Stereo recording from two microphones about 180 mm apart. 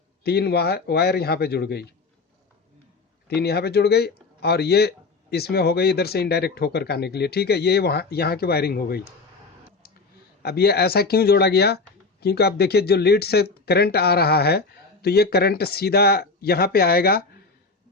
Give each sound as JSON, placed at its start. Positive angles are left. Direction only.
{"t": 0.2, "sound": "speech", "side_deg": 65}
{"t": 3.2, "sound": "speech", "side_deg": 65}
{"t": 10.4, "sound": "speech", "side_deg": 60}